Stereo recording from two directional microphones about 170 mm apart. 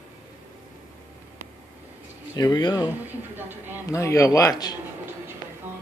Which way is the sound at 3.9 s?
15° left (ahead or behind).